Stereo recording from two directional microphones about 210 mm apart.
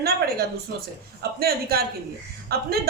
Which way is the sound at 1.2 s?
45° right (ahead or behind).